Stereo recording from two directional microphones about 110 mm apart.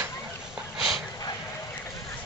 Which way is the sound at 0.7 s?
Centre (ahead or behind).